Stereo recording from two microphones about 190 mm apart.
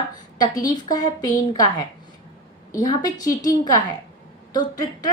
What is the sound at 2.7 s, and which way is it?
Speech, 20° left (ahead or behind).